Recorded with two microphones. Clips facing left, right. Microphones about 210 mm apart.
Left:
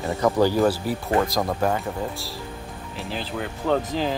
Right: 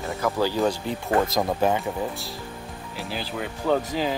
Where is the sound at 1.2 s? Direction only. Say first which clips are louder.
Right 1 dB; centre (ahead or behind).